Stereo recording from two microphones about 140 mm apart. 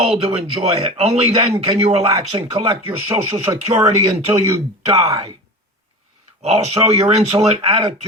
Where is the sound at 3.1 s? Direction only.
20° right (ahead or behind).